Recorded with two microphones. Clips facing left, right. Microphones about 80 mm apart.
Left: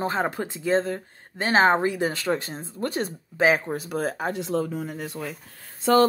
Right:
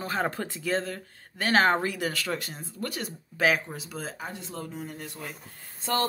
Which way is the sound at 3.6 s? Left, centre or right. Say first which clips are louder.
Left 10 dB; left.